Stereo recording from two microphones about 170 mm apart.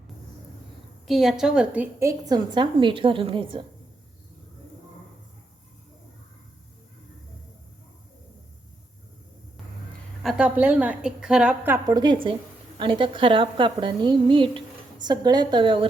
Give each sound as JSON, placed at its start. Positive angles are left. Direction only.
{"t": 1.0, "sound": "a woman's voice", "side_deg": 0}
{"t": 10.2, "sound": "a woman's voice", "side_deg": -5}
{"t": 11.9, "sound": "a woman's voice", "side_deg": -30}